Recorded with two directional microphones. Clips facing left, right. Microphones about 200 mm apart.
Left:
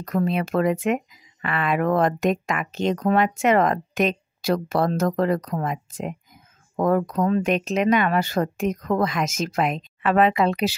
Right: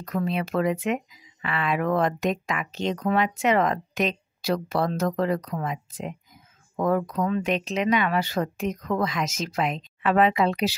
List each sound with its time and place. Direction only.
0.0 s speech: 45° left (ahead or behind)